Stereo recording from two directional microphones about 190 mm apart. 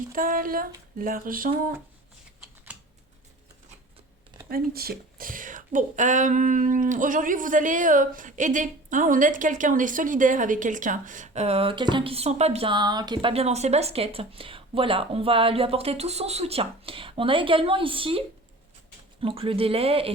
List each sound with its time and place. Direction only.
0.1 s speech: 50° right (ahead or behind)
4.4 s speech: 50° right (ahead or behind); by 18.2 s 25° right (ahead or behind)
19.2 s speech: 30° right (ahead or behind)